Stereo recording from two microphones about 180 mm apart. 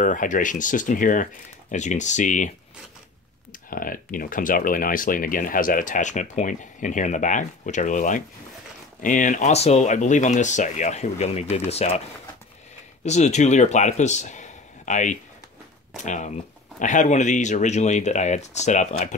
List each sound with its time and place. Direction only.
0.0 s speech: 45° left (ahead or behind)
3.7 s speech: 50° left (ahead or behind); by 12.0 s 35° left (ahead or behind)
13.0 s speech: 40° left (ahead or behind)